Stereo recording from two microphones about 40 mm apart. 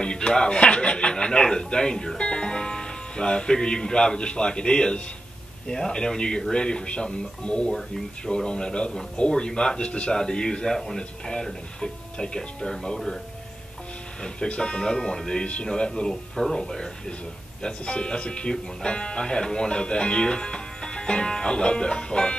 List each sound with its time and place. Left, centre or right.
0.0 s speech: left
11.8 s speech: centre
14.2 s speech: left
15.4 s speech: left